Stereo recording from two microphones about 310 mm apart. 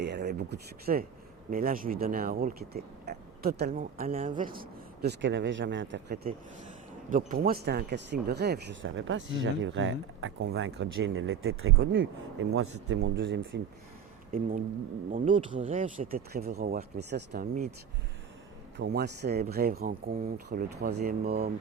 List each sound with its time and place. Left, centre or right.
0.0 s speech: right
15.1 s speech: centre
18.8 s speech: right